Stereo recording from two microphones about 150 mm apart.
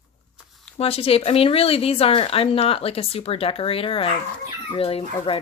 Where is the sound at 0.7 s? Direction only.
40° left (ahead or behind).